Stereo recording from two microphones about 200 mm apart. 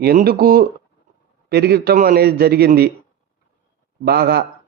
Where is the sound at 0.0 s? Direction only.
50° right (ahead or behind).